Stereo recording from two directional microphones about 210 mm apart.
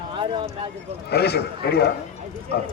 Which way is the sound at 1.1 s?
50° left (ahead or behind).